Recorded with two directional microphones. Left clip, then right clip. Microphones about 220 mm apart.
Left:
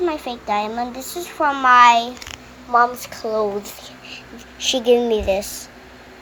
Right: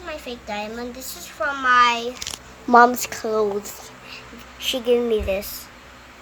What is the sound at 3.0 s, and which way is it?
Speech, 15° right (ahead or behind).